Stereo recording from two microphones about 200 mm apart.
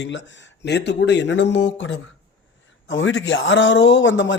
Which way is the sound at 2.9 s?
80° left.